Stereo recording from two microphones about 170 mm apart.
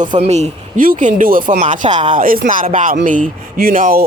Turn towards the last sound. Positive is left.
turn(degrees=-55)  # may be behind; listen again after turning